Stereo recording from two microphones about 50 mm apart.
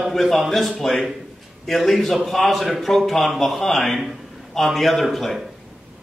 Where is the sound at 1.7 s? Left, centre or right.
Centre.